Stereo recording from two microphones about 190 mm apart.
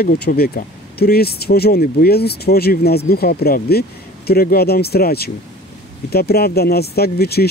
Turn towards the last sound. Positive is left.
turn(degrees=55)  # may be behind; listen again after turning